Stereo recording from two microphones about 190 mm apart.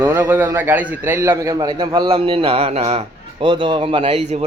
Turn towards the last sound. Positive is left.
turn(degrees=-35)  # may be behind; listen again after turning